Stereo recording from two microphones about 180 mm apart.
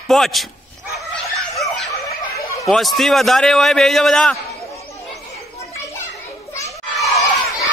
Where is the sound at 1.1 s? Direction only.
Centre (ahead or behind).